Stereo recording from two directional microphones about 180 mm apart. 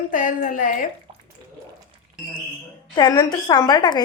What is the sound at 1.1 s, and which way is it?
Bathtub, 30° right (ahead or behind).